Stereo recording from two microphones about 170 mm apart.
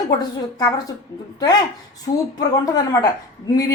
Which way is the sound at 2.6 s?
20° left (ahead or behind).